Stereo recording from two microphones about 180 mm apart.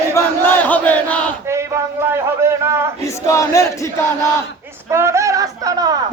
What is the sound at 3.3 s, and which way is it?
Battle cry, 15° left (ahead or behind).